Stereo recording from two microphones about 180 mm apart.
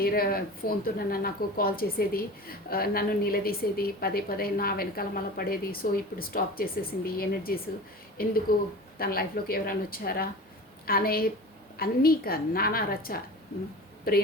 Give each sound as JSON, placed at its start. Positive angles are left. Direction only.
{"t": 0.0, "sound": "a woman's voice", "side_deg": 55}